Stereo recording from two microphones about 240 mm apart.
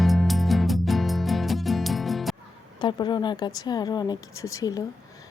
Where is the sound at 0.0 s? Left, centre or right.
Centre.